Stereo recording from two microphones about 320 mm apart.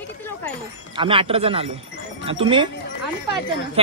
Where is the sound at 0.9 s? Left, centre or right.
Centre.